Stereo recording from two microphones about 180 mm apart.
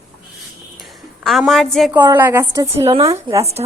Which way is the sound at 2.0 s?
10° right (ahead or behind).